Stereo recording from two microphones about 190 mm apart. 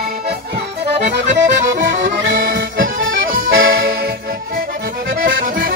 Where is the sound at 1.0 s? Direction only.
60° right (ahead or behind).